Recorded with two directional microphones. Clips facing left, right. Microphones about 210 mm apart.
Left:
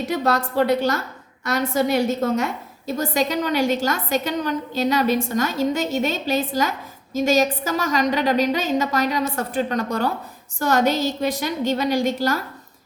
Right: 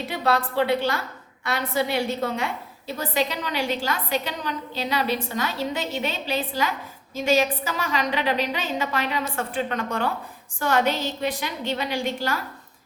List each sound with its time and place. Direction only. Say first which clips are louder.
0.0 s a woman's voice: left 3 dB; 45° left (ahead or behind)